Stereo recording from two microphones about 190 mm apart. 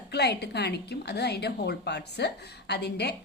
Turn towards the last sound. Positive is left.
turn(degrees=60)  # may be behind; listen again after turning